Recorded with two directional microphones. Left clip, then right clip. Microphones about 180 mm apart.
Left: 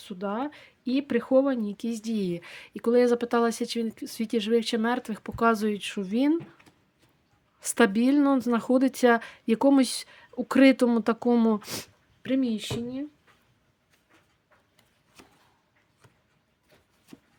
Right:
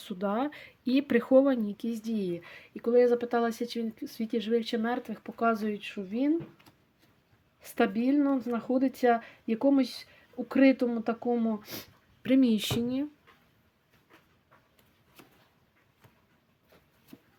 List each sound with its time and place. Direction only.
0.0 s speech: 5° left (ahead or behind)
1.7 s speech: 25° left (ahead or behind); by 6.3 s 40° left (ahead or behind)
7.6 s speech: 35° left (ahead or behind)
12.2 s speech: 5° right (ahead or behind)
12.5 s speech: 20° right (ahead or behind)
15.2 s a sound: 10° left (ahead or behind)